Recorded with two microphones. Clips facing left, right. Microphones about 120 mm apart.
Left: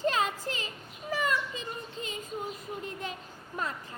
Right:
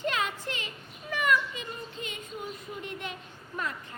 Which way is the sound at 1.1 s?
30° left (ahead or behind).